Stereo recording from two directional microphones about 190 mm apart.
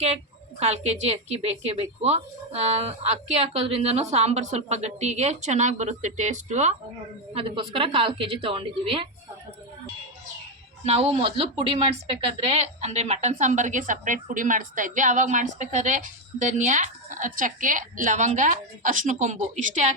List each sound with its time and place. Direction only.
0.6 s speech: 35° right (ahead or behind)
7.3 s a woman's voice: 25° right (ahead or behind)
10.8 s speech: 30° right (ahead or behind)